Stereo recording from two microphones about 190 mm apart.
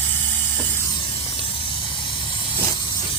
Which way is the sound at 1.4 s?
30° left (ahead or behind).